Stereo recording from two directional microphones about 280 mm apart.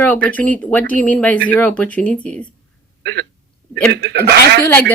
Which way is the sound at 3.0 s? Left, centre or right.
Right.